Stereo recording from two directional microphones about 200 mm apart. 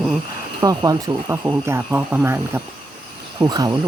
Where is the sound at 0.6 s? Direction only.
20° right (ahead or behind).